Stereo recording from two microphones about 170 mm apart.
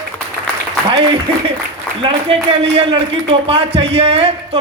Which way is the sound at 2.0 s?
30° right (ahead or behind).